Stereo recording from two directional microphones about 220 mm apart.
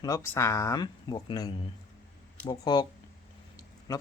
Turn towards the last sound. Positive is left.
turn(degrees=15)  # may be behind; listen again after turning